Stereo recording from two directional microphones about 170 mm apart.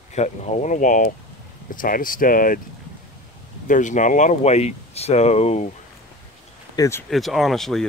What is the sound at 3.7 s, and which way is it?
Speech, 45° left (ahead or behind).